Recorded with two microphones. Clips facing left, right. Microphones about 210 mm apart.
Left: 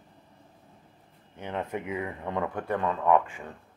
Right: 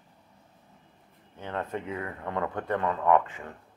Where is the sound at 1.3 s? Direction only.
15° left (ahead or behind).